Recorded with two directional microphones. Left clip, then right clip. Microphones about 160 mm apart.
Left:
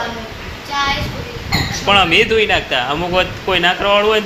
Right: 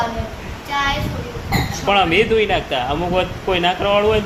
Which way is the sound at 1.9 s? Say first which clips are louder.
Left 3 dB; 15° right (ahead or behind).